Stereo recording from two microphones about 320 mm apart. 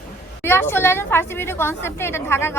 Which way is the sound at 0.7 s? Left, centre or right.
Centre.